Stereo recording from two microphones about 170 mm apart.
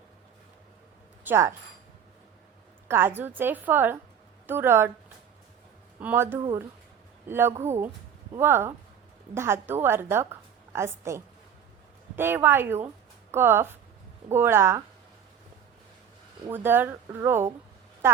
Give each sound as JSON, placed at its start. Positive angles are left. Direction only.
{"t": 1.2, "sound": "speech", "side_deg": -15}
{"t": 2.8, "sound": "a woman's voice", "side_deg": -15}
{"t": 6.0, "sound": "a woman's voice", "side_deg": -10}
{"t": 7.5, "sound": "speech", "side_deg": -40}
{"t": 8.3, "sound": "a woman's voice", "side_deg": -15}
{"t": 16.5, "sound": "a woman's voice", "side_deg": -10}